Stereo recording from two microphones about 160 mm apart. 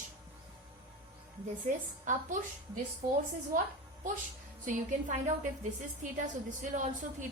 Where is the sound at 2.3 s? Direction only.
55° right (ahead or behind).